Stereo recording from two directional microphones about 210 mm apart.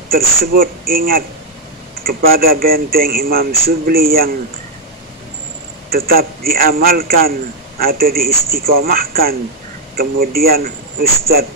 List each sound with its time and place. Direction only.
0.1 s a man's voice: 45° right (ahead or behind)
5.9 s a man's voice: 45° right (ahead or behind)